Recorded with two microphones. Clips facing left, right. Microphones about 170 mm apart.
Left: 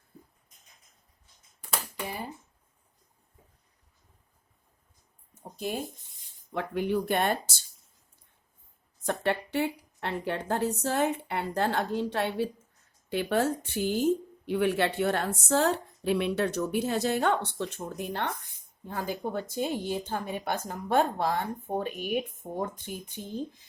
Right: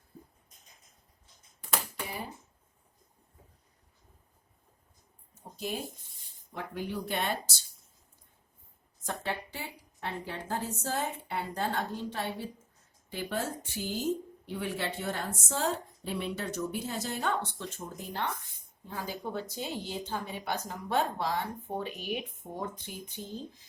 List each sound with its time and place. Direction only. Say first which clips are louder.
5.3 s a sound: left 3 dB; 55° left (ahead or behind)
6.5 s speech: left 8 dB; 70° left (ahead or behind); by 7.5 s 50° left (ahead or behind)
9.0 s speech: left 7 dB; 65° left (ahead or behind)
18.9 s speech: left 5 dB; 50° left (ahead or behind)